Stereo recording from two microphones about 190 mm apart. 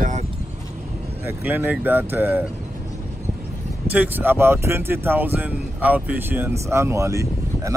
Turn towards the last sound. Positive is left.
turn(degrees=-15)  # may be behind; listen again after turning